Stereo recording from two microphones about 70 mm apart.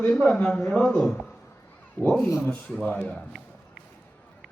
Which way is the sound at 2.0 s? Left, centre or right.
Left.